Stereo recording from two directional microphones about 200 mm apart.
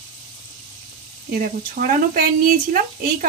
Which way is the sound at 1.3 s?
45° right (ahead or behind).